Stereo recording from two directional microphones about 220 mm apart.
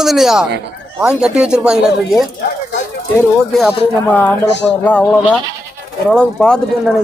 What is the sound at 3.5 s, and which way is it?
Speech, 5° left (ahead or behind).